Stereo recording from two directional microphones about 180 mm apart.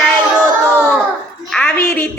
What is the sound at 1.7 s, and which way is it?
Speech, 15° left (ahead or behind).